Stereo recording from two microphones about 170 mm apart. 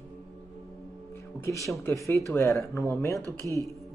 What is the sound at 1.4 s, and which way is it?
Speech, 20° left (ahead or behind).